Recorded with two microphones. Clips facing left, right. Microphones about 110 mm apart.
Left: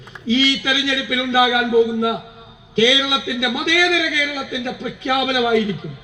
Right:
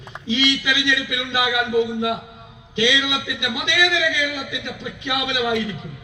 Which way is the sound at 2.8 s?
35° left (ahead or behind).